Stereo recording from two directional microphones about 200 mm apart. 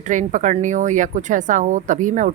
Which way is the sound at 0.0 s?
40° right (ahead or behind).